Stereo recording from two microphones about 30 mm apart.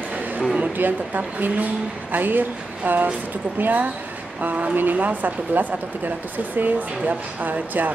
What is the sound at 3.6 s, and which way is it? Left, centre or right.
Speech, right.